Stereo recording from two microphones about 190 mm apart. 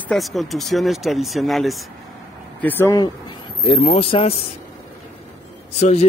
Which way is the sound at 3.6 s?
30° left (ahead or behind).